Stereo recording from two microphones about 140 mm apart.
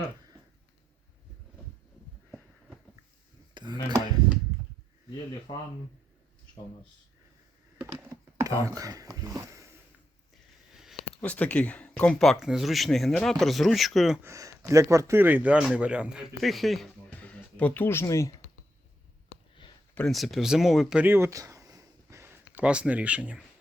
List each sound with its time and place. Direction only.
3.5 s a sound: 30° right (ahead or behind)
5.5 s speech: 30° left (ahead or behind)
7.8 s a sound: 15° right (ahead or behind)
11.2 s speech: 10° left (ahead or behind)
14.2 s speech: 20° right (ahead or behind); by 18.3 s 20° left (ahead or behind)
19.9 s speech: 10° left (ahead or behind)
20.1 s speech: centre (ahead or behind)